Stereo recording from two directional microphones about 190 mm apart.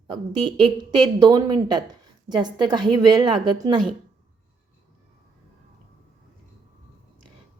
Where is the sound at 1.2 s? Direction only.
20° right (ahead or behind).